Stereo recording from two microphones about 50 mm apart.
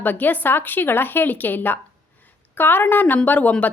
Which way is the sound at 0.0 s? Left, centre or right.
Left.